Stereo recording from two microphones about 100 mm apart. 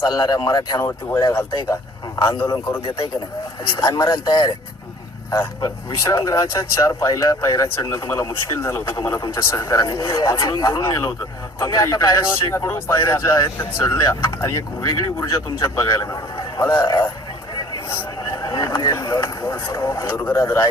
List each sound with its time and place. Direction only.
0.1 s speech: 35° left (ahead or behind)
3.8 s speech: 35° left (ahead or behind)
5.3 s speech: 30° left (ahead or behind)
12.3 s speech: 25° left (ahead or behind)
14.1 s speech: 30° left (ahead or behind)
17.8 s a sound: 25° left (ahead or behind)
18.4 s a sound: 40° left (ahead or behind)
19.5 s speech: 25° left (ahead or behind)